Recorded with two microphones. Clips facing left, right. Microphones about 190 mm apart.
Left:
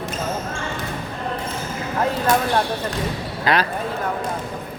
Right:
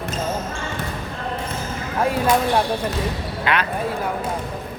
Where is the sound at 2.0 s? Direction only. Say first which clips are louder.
Right 1 dB; 10° right (ahead or behind).